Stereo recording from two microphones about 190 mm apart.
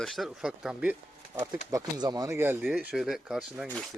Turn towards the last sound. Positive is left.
turn(degrees=0)  # may be behind; listen again after turning